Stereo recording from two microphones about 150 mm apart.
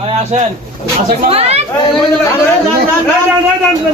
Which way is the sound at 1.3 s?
40° right (ahead or behind).